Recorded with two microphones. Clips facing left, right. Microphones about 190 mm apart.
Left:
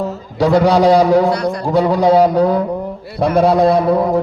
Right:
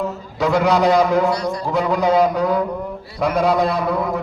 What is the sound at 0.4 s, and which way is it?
A man's voice, 35° left (ahead or behind).